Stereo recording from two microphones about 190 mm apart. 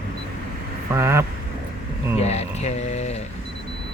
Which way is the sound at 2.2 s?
35° left (ahead or behind).